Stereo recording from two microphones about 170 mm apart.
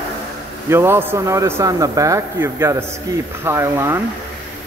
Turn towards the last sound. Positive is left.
turn(degrees=-15)  # may be behind; listen again after turning